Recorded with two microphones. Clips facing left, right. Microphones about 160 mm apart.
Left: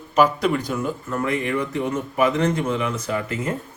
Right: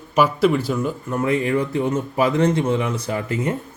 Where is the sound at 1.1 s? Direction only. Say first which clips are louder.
Right 4 dB; 25° right (ahead or behind).